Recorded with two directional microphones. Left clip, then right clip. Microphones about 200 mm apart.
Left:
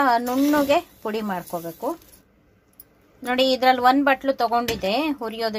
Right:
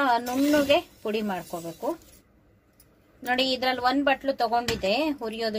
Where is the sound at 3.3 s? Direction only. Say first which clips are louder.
Left 6 dB; 20° left (ahead or behind).